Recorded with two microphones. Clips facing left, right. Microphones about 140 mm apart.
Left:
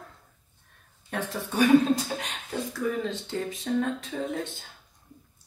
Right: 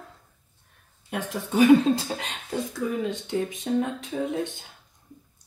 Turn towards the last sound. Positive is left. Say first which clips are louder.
# right 3 dB
turn(degrees=-15)  # may be behind; listen again after turning